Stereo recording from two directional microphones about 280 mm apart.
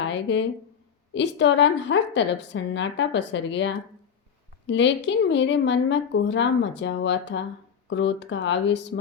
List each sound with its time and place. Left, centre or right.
0.1 s a woman's voice: left